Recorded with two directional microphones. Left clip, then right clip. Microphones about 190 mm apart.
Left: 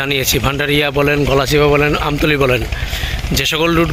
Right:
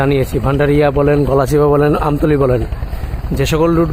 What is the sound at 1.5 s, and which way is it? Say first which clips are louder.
Speech: right 1 dB; 20° right (ahead or behind).